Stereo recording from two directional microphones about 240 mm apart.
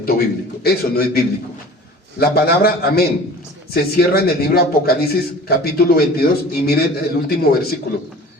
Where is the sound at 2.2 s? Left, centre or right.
Left.